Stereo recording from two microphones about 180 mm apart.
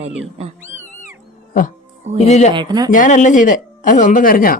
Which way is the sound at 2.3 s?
40° left (ahead or behind).